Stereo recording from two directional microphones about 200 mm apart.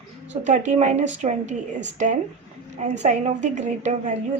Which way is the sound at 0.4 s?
35° right (ahead or behind).